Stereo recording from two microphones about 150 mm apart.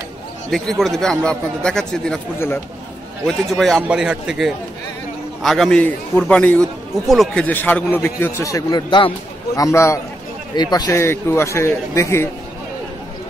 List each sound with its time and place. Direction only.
0.5 s a man's voice: centre (ahead or behind)
2.3 s a man's voice: 15° left (ahead or behind)
3.3 s a man's voice: centre (ahead or behind)
7.4 s a man's voice: 10° left (ahead or behind); by 9.1 s 30° left (ahead or behind)
9.6 s a man's voice: 20° left (ahead or behind)